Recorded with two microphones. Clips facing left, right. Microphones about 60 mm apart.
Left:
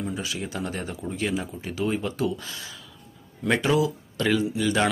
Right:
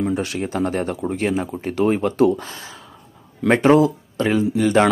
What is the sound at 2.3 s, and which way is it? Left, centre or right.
Speech, right.